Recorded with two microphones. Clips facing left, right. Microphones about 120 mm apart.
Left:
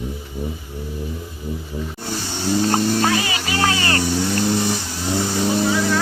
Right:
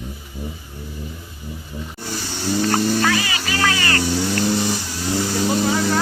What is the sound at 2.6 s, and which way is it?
Speech, 20° left (ahead or behind).